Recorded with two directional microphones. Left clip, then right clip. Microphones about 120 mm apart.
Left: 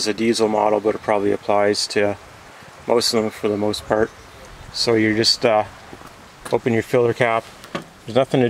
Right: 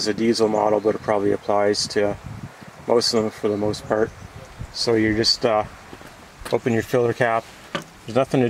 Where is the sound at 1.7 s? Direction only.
40° left (ahead or behind).